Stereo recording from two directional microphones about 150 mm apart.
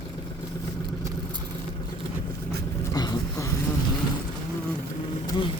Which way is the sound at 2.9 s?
25° left (ahead or behind).